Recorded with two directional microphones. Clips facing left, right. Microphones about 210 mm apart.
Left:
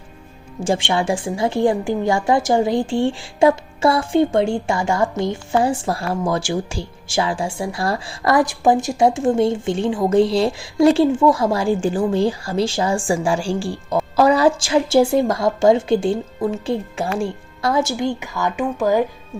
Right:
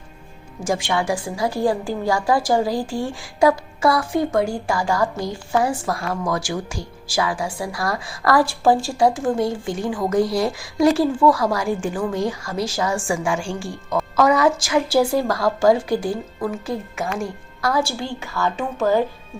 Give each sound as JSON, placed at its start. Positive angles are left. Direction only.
{"t": 0.6, "sound": "a woman's voice", "side_deg": 30}